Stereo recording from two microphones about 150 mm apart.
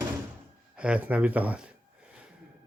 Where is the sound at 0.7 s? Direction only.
5° right (ahead or behind).